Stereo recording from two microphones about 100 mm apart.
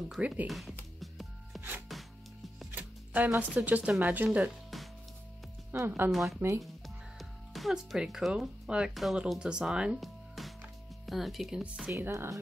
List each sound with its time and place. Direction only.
0.5 s speech: centre (ahead or behind)
0.9 s music: centre (ahead or behind)
2.7 s speech: 15° right (ahead or behind)
5.7 s speech: 20° right (ahead or behind)
6.1 s speech: centre (ahead or behind)
11.9 s speech: 25° right (ahead or behind)